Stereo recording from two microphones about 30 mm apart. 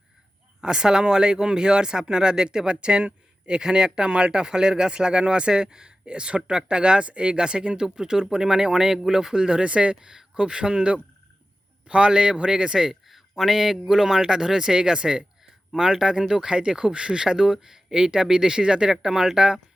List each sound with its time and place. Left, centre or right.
0.6 s speech: right
9.6 s speech: right
13.1 s a sound: centre
13.8 s speech: centre
16.3 s speech: right